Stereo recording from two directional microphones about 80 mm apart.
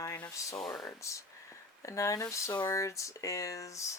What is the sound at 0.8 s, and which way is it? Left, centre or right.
Speech, left.